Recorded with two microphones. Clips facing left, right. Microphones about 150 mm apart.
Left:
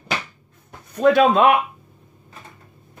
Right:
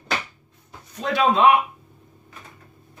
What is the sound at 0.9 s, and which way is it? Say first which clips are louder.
Speech: left 6 dB; 50° left (ahead or behind).